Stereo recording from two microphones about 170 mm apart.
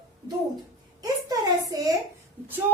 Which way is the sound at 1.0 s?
20° right (ahead or behind).